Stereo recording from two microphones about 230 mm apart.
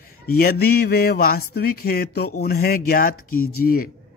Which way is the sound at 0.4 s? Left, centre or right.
Left.